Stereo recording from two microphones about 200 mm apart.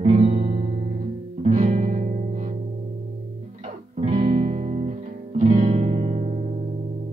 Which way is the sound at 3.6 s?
30° right (ahead or behind).